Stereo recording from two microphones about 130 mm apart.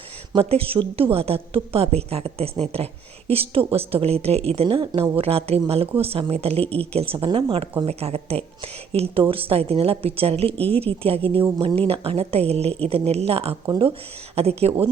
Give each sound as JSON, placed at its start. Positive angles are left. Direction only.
{"t": 0.3, "sound": "a woman's voice", "side_deg": -45}
{"t": 6.6, "sound": "speech", "side_deg": 10}
{"t": 6.9, "sound": "a woman's voice", "side_deg": -45}
{"t": 14.3, "sound": "a woman's voice", "side_deg": -50}